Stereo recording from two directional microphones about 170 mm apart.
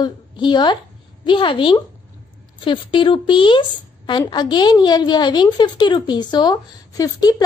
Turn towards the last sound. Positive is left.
turn(degrees=20)  # may be behind; listen again after turning